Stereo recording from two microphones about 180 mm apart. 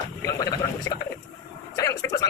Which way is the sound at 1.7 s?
15° left (ahead or behind).